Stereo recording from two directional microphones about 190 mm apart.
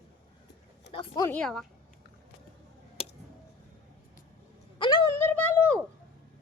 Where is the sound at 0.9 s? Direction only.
25° left (ahead or behind).